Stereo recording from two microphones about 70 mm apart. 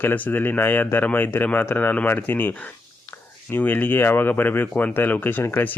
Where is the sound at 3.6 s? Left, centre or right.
Left.